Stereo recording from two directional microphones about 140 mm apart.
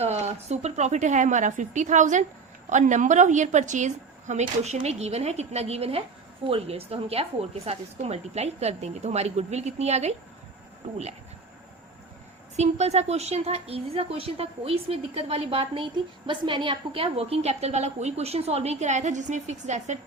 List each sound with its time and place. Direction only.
0.0 s a woman's voice: 50° right (ahead or behind)
12.5 s speech: 55° right (ahead or behind)